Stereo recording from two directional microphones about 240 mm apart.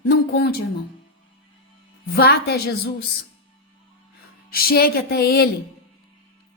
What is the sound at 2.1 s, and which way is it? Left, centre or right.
Speech, left.